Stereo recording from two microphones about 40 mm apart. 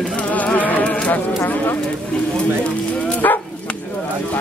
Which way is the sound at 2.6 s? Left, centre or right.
Left.